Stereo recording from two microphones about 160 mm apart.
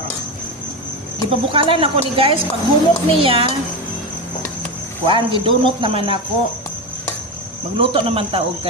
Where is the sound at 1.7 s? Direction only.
35° right (ahead or behind).